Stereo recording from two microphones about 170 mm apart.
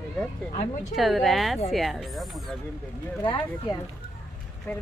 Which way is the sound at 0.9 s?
Centre (ahead or behind).